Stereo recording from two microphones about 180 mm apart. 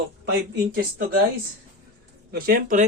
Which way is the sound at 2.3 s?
55° right (ahead or behind).